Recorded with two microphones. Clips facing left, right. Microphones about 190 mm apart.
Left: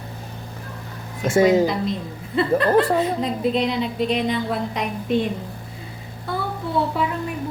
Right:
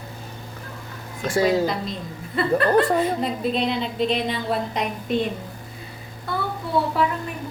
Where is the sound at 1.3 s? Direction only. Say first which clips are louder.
Left 4 dB; 20° left (ahead or behind).